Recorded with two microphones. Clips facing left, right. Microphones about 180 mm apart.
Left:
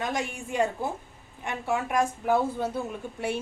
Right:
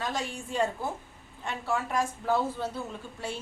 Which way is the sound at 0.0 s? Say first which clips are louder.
Left 3 dB; 15° left (ahead or behind).